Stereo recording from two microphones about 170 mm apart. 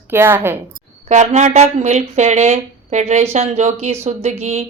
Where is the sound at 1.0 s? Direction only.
45° right (ahead or behind).